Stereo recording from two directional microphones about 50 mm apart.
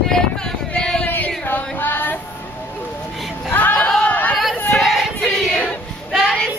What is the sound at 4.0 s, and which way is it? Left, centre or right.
Chatter, left.